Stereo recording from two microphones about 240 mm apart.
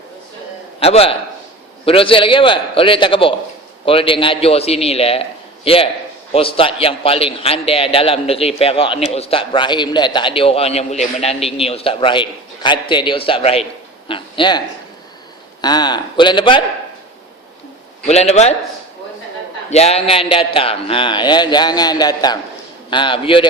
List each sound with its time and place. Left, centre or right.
0.8 s a man's voice: left
15.6 s a man's voice: centre
18.0 s a man's voice: left
19.7 s a man's voice: left